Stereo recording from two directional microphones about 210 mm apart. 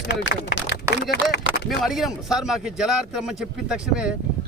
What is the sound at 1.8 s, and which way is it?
A man's voice, centre (ahead or behind).